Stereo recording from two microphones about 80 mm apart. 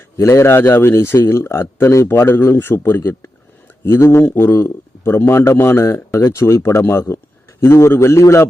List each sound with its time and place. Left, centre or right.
0.2 s a man's voice: left
4.3 s a man's voice: left
4.5 s a man's voice: left